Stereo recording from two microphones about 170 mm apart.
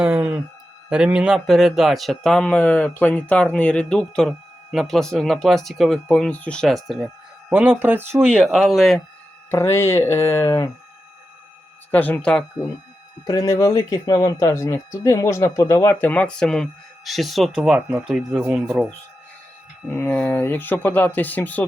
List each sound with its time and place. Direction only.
0.0 s a sound: 10° right (ahead or behind)
0.9 s speech: 5° right (ahead or behind)
9.5 s speech: 15° left (ahead or behind)
11.9 s speech: 10° left (ahead or behind)
13.2 s speech: 15° left (ahead or behind); by 18.9 s 5° right (ahead or behind)
19.9 s speech: 10° left (ahead or behind)